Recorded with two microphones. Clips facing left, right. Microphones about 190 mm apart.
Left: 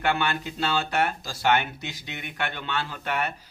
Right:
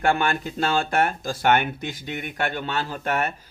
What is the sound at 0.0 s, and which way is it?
Speech, 45° right (ahead or behind).